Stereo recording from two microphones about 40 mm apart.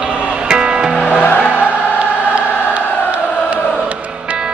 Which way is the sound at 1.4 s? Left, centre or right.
Right.